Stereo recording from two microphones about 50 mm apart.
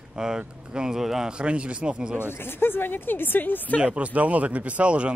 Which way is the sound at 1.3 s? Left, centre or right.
Right.